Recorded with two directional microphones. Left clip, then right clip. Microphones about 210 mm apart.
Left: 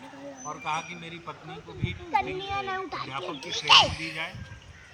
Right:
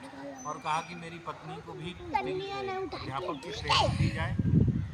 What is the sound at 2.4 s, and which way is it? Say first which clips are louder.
Speech: left 4 dB; 30° left (ahead or behind).